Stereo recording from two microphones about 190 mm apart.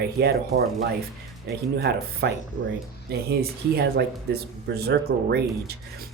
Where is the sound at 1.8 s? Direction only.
60° right (ahead or behind).